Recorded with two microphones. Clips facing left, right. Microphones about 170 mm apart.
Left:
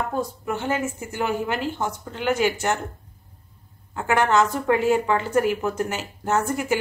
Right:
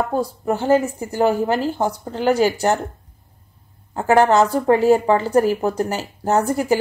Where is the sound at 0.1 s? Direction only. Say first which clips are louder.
Right 5 dB; 35° right (ahead or behind).